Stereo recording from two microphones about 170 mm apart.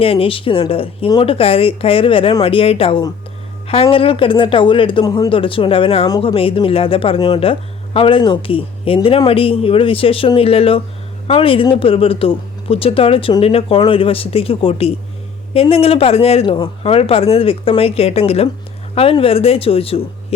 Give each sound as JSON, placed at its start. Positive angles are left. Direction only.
{"t": 0.0, "sound": "speech", "side_deg": 35}